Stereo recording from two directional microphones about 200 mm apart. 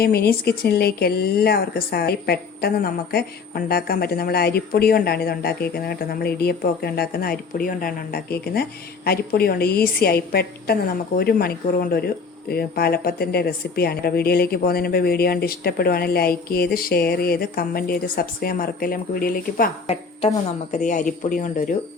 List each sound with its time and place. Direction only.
0.0 s a woman's voice: 50° left (ahead or behind)